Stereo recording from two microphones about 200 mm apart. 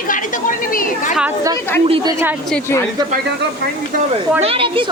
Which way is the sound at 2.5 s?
10° left (ahead or behind).